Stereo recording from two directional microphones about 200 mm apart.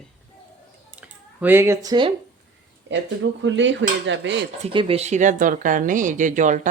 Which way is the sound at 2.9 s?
65° right (ahead or behind).